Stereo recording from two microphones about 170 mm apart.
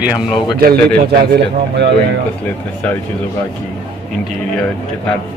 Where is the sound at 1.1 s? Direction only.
85° right.